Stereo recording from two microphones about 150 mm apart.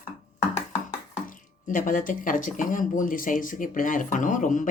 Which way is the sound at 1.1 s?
60° left (ahead or behind).